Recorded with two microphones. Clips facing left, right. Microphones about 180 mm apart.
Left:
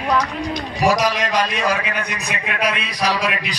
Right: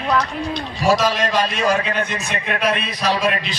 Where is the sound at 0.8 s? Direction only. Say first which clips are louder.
Even; 15° left (ahead or behind).